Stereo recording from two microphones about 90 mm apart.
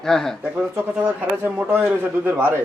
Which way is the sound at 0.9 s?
20° right (ahead or behind).